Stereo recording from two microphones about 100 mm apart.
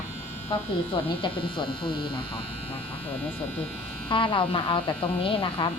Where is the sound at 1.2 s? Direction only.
55° left (ahead or behind).